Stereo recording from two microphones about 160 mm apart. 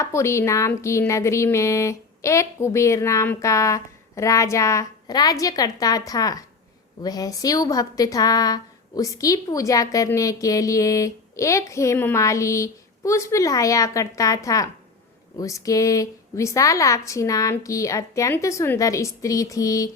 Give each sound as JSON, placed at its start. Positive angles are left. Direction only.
{"t": 0.0, "sound": "a woman's voice", "side_deg": 15}